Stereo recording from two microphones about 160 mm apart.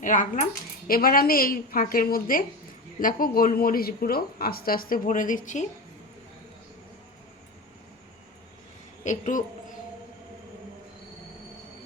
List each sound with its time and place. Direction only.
0.0 s speech: 55° left (ahead or behind)
0.9 s a woman's voice: 65° left (ahead or behind)
9.0 s a woman's voice: 50° left (ahead or behind)